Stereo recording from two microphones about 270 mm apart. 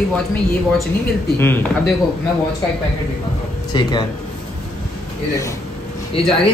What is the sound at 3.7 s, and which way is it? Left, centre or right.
Speech, centre.